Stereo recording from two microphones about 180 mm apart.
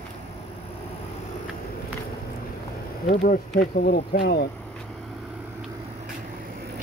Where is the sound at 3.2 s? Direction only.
55° left (ahead or behind).